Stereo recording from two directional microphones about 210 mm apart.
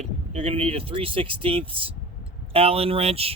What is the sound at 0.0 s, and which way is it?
A man's voice, 30° right (ahead or behind).